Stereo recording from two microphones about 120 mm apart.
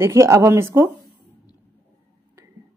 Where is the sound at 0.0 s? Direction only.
25° right (ahead or behind).